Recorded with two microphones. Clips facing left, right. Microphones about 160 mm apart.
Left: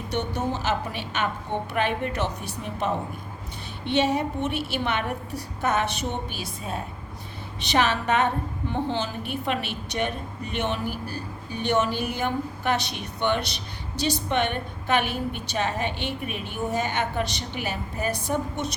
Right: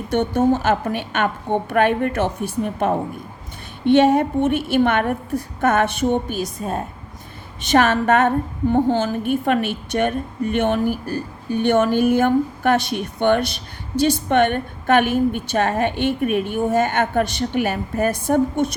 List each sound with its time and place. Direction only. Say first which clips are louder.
0.1 s a woman's voice: right 10 dB; 50° right (ahead or behind)